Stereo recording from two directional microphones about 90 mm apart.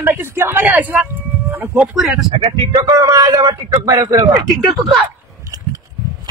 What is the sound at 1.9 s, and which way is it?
Speech, 5° right (ahead or behind).